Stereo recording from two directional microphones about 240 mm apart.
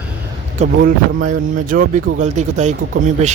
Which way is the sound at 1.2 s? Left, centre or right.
Right.